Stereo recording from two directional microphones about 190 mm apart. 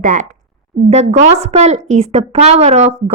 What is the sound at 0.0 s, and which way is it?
A woman's voice, 40° right (ahead or behind).